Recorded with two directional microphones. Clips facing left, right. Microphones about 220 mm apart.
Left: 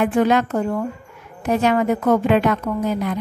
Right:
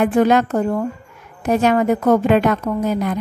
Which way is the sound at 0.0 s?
45° right (ahead or behind).